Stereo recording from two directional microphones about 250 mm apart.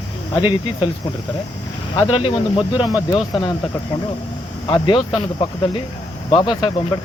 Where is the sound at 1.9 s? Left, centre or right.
Centre.